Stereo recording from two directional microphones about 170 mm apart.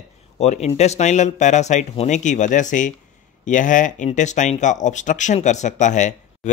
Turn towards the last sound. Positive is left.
turn(degrees=45)  # may be behind; listen again after turning